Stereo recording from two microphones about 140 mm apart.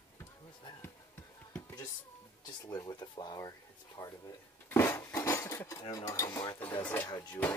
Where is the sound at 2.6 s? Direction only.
30° left (ahead or behind).